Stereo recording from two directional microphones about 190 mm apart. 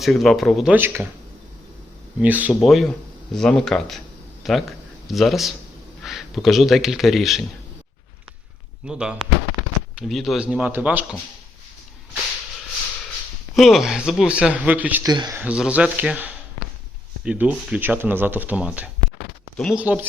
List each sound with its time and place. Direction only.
0.0 s speech: centre (ahead or behind)
2.2 s a man's voice: 10° right (ahead or behind)
8.9 s speech: 5° right (ahead or behind)
13.6 s speech: centre (ahead or behind)
15.0 s speech: 20° right (ahead or behind)
15.4 s speech: 5° right (ahead or behind)
19.8 s speech: 10° right (ahead or behind)